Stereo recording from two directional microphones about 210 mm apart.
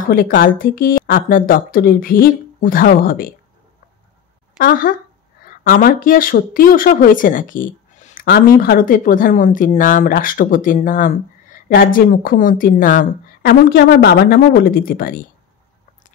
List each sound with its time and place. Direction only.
0.1 s speech: 40° left (ahead or behind)
4.6 s speech: 40° left (ahead or behind)